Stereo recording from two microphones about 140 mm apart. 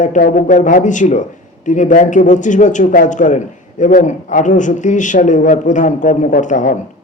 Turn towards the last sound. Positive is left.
turn(degrees=65)  # may be behind; listen again after turning